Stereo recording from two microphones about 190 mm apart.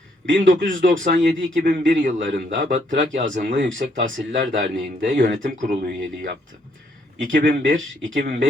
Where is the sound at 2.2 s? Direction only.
75° right (ahead or behind).